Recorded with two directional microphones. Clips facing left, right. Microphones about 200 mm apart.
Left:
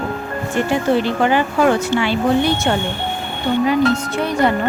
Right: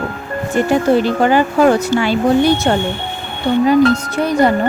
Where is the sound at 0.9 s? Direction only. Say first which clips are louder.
Right 2 dB; 40° right (ahead or behind).